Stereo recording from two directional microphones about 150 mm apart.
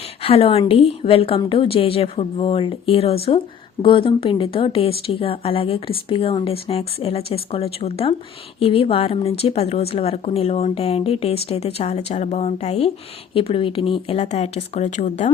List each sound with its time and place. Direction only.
0.2 s a woman's voice: 40° left (ahead or behind)